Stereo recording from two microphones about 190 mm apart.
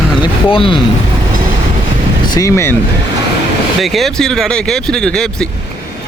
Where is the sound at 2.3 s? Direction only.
15° left (ahead or behind).